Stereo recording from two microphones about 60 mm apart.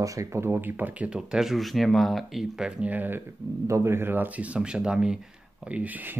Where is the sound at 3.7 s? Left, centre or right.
Right; by 5.1 s centre.